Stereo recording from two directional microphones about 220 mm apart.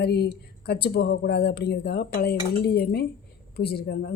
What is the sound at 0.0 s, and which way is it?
Speech, 45° left (ahead or behind).